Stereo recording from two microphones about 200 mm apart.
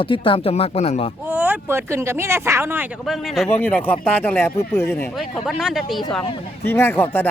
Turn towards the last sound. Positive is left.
turn(degrees=10)  # may be behind; listen again after turning